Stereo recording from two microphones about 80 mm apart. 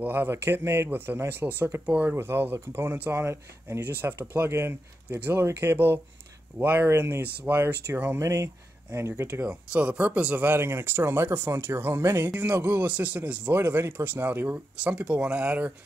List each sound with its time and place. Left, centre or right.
0.0 s speech: right
2.1 s speech: right
3.2 s speech: right
3.8 s speech: right
9.5 s speech: centre